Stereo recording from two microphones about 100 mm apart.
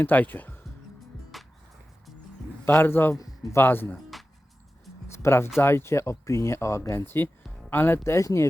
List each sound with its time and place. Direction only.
0.0 s speech: 20° left (ahead or behind)
1.3 s music: centre (ahead or behind)
2.6 s speech: 20° left (ahead or behind)
4.1 s music: centre (ahead or behind)
5.1 s speech: 25° left (ahead or behind)